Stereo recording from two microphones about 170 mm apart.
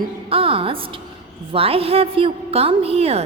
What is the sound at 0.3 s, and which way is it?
A woman's voice, 35° right (ahead or behind).